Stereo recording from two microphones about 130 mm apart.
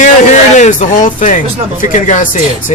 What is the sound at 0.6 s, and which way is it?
Speech, 75° left (ahead or behind).